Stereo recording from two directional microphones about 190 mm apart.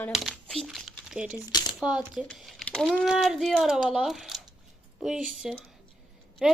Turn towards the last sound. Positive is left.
turn(degrees=0)  # may be behind; listen again after turning